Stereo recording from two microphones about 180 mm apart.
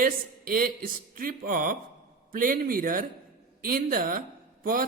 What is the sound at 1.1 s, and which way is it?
A man's voice, 50° right (ahead or behind).